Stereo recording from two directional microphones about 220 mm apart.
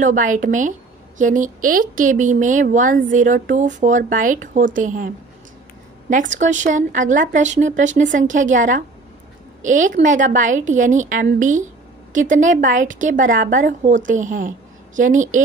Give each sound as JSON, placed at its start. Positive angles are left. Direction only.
{"t": 0.0, "sound": "a woman's voice", "side_deg": -35}